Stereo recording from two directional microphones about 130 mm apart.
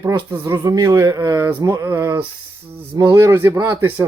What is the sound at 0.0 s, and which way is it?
Speech, 20° right (ahead or behind).